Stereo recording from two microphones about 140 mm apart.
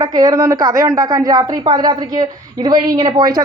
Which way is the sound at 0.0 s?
25° right (ahead or behind).